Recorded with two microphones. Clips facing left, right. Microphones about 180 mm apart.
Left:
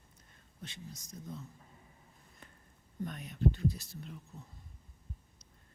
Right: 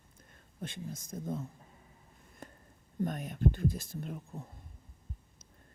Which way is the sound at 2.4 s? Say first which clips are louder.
Right 9 dB; 45° right (ahead or behind).